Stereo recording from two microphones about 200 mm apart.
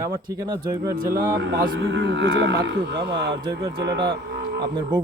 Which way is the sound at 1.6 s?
60° right (ahead or behind).